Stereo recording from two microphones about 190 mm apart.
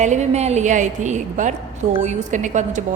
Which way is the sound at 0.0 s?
40° right (ahead or behind).